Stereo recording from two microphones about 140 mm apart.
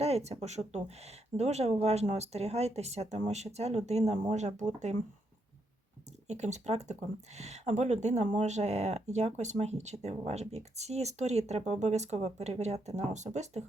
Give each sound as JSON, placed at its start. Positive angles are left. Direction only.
{"t": 0.0, "sound": "speech", "side_deg": -50}
{"t": 6.2, "sound": "speech", "side_deg": -55}